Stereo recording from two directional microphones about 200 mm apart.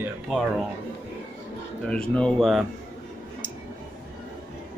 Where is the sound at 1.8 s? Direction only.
5° left (ahead or behind).